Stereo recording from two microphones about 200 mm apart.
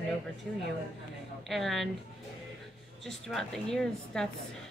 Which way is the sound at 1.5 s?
Centre (ahead or behind).